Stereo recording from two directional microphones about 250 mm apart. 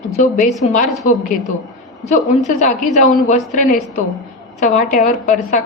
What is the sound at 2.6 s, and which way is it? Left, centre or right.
A woman's voice, left.